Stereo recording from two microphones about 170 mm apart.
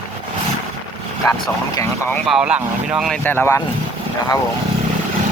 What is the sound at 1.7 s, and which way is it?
Speech, 15° left (ahead or behind).